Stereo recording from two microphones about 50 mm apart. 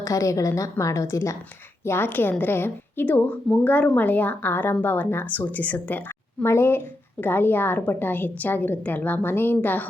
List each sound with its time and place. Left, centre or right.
0.0 s a woman's voice: left
1.8 s a woman's voice: left
2.0 s a woman's voice: left
3.1 s a woman's voice: left
6.4 s a woman's voice: left